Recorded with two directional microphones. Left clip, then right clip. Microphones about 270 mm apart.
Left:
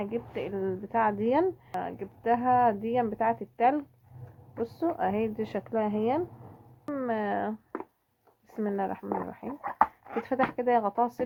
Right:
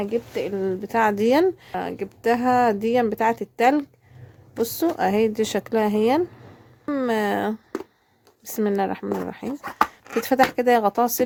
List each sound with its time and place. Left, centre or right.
0.0 s speech: right
8.5 s speech: right
9.5 s chopping: centre
10.2 s speech: right